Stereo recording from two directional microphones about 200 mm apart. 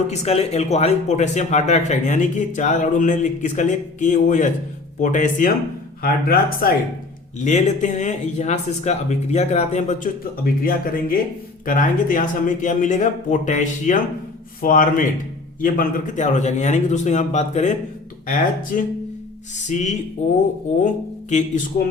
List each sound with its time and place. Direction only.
0.1 s speech: 35° left (ahead or behind)